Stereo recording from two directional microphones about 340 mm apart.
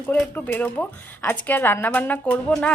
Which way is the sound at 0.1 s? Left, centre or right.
Centre.